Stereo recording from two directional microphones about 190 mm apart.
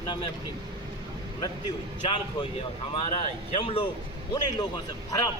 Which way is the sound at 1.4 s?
25° left (ahead or behind).